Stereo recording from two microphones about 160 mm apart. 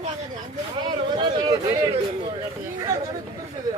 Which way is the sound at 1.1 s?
30° right (ahead or behind).